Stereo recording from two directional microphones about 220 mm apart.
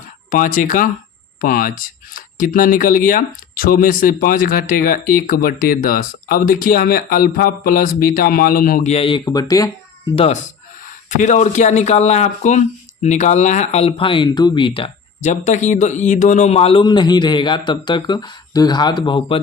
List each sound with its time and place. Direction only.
0.3 s speech: 40° left (ahead or behind); by 9.6 s 15° left (ahead or behind)
10.8 s speech: 35° left (ahead or behind)